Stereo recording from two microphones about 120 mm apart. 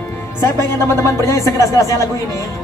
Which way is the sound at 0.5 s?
25° left (ahead or behind).